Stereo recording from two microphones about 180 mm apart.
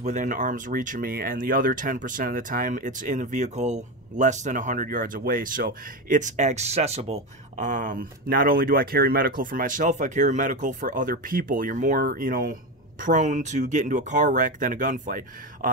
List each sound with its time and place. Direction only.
0.0 s speech: 45° right (ahead or behind)